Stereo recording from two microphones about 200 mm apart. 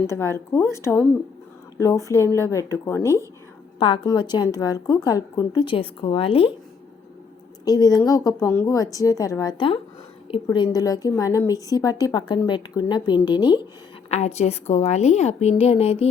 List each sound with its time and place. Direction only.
0.1 s speech: 15° left (ahead or behind)
3.8 s a woman's voice: 25° left (ahead or behind)
7.6 s a woman's voice: 20° left (ahead or behind)
14.1 s a woman's voice: 35° left (ahead or behind)